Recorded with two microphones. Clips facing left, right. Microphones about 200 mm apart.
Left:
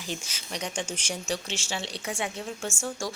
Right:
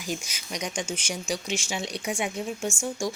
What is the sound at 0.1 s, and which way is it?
Speech, 10° right (ahead or behind).